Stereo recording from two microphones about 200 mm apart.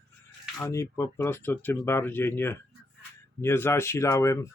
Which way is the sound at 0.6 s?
15° left (ahead or behind).